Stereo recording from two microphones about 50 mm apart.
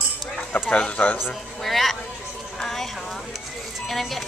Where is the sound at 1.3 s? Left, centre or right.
Centre.